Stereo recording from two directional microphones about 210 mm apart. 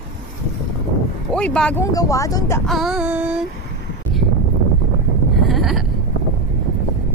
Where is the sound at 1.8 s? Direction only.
15° left (ahead or behind).